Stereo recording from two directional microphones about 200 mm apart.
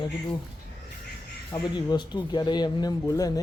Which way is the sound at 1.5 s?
20° left (ahead or behind).